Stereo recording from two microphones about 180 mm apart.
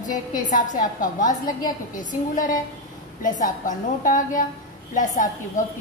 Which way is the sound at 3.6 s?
50° left (ahead or behind).